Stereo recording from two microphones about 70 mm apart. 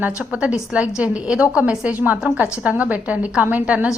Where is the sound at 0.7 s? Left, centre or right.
Centre.